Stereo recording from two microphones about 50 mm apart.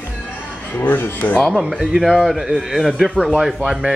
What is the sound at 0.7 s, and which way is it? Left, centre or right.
Speech, left.